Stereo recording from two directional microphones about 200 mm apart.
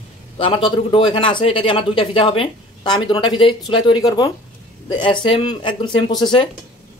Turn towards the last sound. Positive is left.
turn(degrees=25)  # may be behind; listen again after turning